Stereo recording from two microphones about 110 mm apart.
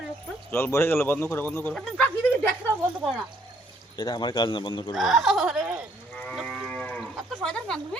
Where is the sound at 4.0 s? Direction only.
40° left (ahead or behind).